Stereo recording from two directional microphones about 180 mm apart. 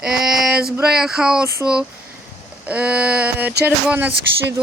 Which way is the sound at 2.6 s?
5° right (ahead or behind).